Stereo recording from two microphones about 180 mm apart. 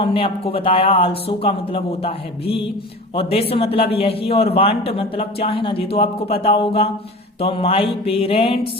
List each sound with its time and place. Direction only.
0.0 s speech: 30° left (ahead or behind)